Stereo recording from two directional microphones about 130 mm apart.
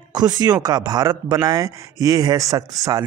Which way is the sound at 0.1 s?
30° right (ahead or behind).